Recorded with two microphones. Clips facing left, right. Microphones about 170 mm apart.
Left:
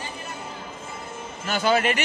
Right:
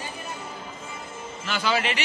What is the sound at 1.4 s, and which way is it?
Speech, 45° left (ahead or behind).